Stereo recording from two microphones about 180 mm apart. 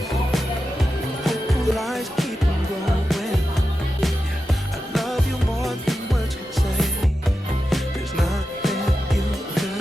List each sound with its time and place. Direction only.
1.2 s music: centre (ahead or behind)
4.9 s music: centre (ahead or behind)
7.7 s music: centre (ahead or behind)